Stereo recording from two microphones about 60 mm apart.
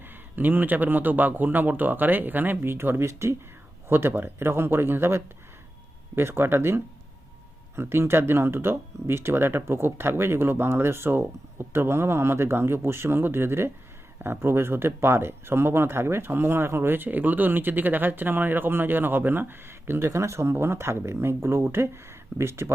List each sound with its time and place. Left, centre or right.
0.3 s speech: right